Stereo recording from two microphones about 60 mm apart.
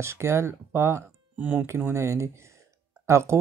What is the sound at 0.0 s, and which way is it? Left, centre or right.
Speech, right.